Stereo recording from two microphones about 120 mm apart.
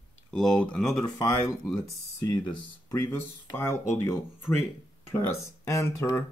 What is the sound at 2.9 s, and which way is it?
Speech, 20° left (ahead or behind).